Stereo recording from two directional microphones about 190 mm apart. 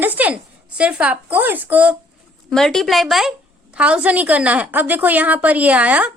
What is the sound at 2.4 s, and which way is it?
A woman's voice, centre (ahead or behind).